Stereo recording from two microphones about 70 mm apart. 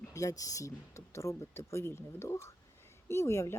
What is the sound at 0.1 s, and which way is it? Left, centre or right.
Speech, left.